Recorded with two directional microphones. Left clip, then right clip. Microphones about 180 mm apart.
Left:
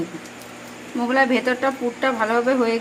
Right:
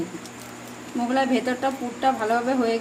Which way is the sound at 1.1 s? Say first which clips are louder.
Left 5 dB; 25° left (ahead or behind).